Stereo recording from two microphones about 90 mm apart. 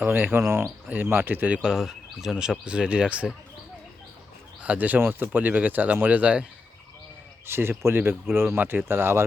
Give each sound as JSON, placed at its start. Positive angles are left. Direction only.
{"t": 0.0, "sound": "speech", "side_deg": -25}
{"t": 0.9, "sound": "speech", "side_deg": -20}
{"t": 4.6, "sound": "speech", "side_deg": -15}
{"t": 7.4, "sound": "speech", "side_deg": -25}